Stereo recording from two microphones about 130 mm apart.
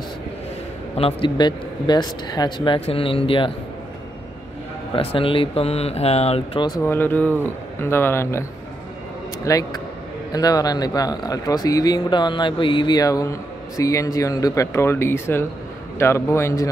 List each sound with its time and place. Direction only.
0.9 s speech: 45° left (ahead or behind)
1.4 s speech: 35° left (ahead or behind)
4.9 s speech: 45° left (ahead or behind)
6.8 s speech: 15° left (ahead or behind)